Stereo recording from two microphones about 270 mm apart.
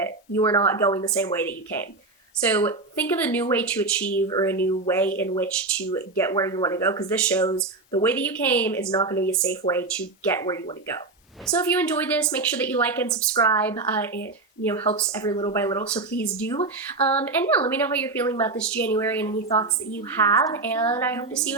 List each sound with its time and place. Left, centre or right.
0.0 s a woman's voice: centre
9.6 s speech: left
10.2 s a woman's voice: centre